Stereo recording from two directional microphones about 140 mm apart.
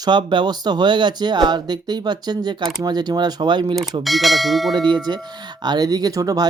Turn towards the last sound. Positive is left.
turn(degrees=-25)  # may be behind; listen again after turning